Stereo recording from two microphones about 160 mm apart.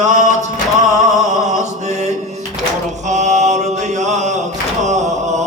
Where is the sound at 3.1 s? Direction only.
50° right (ahead or behind).